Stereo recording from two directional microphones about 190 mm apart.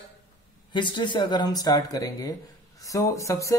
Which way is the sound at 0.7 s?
25° left (ahead or behind).